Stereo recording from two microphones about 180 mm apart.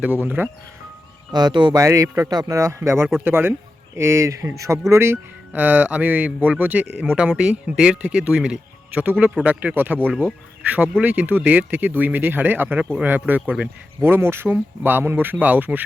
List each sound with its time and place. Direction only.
0.0 s speech: 10° right (ahead or behind)
1.3 s speech: 25° right (ahead or behind)